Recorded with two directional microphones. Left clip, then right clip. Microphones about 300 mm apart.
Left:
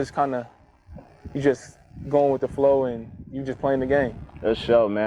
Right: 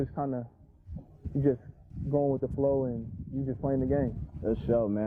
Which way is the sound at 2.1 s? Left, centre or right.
Centre.